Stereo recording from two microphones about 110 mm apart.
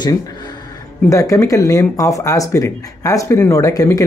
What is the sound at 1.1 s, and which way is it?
Speech, 30° left (ahead or behind).